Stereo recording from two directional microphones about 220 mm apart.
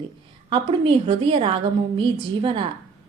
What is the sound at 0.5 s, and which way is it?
Speech, 25° right (ahead or behind).